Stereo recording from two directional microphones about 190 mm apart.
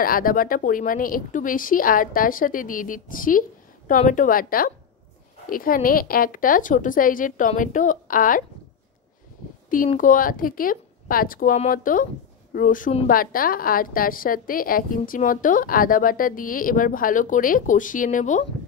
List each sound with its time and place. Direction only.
0.0 s a woman's voice: 50° left (ahead or behind)
9.9 s a woman's voice: 45° left (ahead or behind)